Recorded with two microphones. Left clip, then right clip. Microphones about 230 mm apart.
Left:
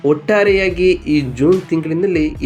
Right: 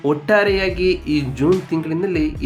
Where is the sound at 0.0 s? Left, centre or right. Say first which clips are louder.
Left 3 dB; centre.